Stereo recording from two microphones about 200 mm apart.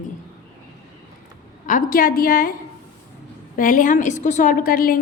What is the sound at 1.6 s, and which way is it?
Speech, 45° left (ahead or behind).